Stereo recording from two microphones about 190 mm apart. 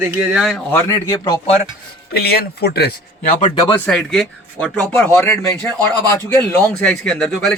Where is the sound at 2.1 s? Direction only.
55° left (ahead or behind).